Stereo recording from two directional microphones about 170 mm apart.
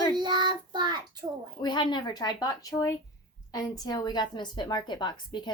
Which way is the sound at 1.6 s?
25° left (ahead or behind).